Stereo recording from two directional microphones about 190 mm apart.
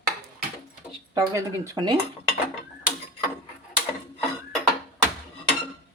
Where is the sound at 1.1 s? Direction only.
15° right (ahead or behind).